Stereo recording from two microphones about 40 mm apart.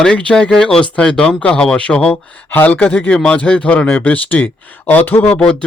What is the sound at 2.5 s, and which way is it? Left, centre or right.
Speech, left.